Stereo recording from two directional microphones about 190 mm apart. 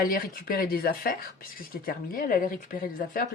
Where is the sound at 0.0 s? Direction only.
50° left (ahead or behind).